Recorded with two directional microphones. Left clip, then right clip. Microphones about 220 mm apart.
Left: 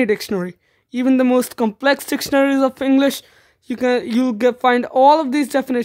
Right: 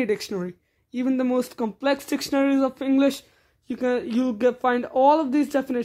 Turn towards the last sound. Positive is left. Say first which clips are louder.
# left 5 dB
turn(degrees=35)  # may be behind; listen again after turning